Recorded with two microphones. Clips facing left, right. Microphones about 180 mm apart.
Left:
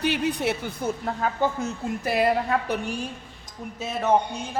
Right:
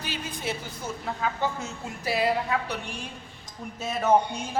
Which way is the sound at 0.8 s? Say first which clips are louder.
Left 4 dB; 55° left (ahead or behind).